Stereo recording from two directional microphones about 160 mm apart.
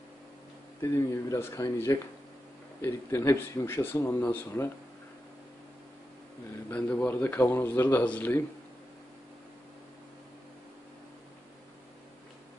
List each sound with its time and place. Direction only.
0.7 s speech: 20° left (ahead or behind)
6.7 s speech: 10° left (ahead or behind)